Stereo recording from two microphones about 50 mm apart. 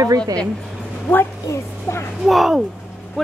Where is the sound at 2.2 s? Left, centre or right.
Centre.